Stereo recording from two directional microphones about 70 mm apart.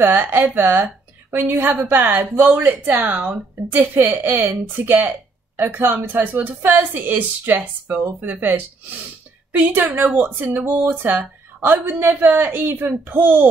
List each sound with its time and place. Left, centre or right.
0.0 s speech: right